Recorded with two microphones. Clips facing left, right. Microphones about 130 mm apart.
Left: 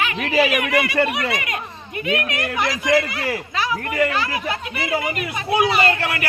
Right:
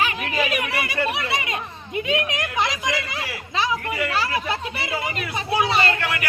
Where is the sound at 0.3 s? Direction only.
75° left (ahead or behind).